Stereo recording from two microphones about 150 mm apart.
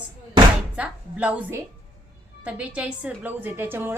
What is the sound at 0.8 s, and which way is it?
A woman's voice, 10° right (ahead or behind).